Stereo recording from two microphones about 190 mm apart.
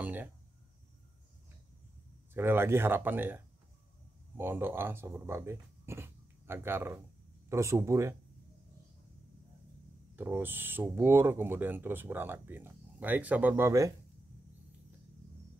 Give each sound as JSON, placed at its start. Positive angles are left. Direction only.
{"t": 0.0, "sound": "a sound", "side_deg": -10}
{"t": 2.3, "sound": "speech", "side_deg": -10}
{"t": 10.1, "sound": "speech", "side_deg": -10}